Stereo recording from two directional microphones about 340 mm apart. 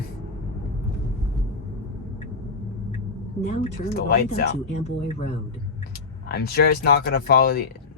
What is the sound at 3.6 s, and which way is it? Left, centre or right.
Speech, left.